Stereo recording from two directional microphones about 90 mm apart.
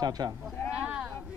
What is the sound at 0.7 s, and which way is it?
Speech, 15° right (ahead or behind).